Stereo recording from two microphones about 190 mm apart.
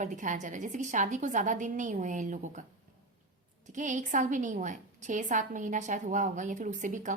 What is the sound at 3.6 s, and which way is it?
A woman's voice, 40° right (ahead or behind).